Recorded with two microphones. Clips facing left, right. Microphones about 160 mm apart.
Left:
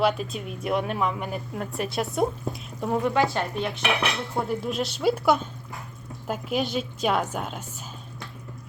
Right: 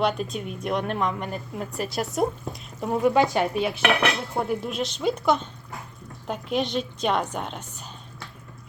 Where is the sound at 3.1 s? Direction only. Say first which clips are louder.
Right 3 dB; 15° right (ahead or behind).